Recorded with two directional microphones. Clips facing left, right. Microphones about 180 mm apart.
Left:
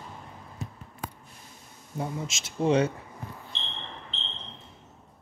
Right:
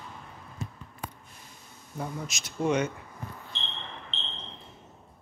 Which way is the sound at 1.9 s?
20° left (ahead or behind).